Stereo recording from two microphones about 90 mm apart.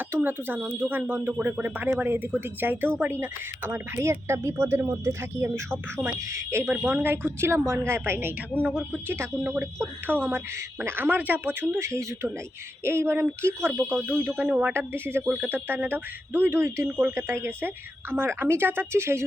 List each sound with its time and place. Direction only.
0.1 s speech: 25° right (ahead or behind)
6.7 s speech: 20° right (ahead or behind)
8.6 s speech: 10° right (ahead or behind)
9.0 s speech: 25° right (ahead or behind)